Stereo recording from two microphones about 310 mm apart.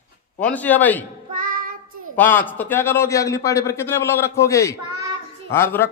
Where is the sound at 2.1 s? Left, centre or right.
Centre.